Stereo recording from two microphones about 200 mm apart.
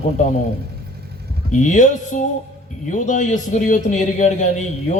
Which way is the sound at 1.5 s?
40° left (ahead or behind).